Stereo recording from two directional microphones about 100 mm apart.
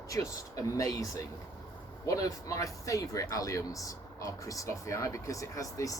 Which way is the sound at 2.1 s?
35° left (ahead or behind).